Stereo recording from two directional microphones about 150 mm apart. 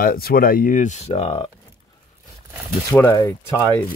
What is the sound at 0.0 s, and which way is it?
Speech, 75° left (ahead or behind).